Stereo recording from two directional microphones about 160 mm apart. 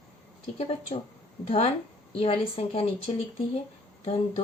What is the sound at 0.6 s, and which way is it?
Speech, 40° left (ahead or behind).